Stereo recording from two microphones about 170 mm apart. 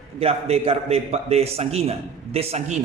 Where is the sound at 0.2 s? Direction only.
35° right (ahead or behind).